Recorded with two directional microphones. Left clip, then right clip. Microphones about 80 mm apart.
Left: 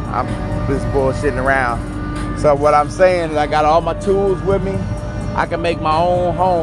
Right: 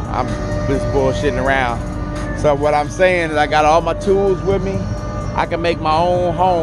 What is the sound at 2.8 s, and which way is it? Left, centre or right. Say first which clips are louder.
Speech: left 1 dB; right.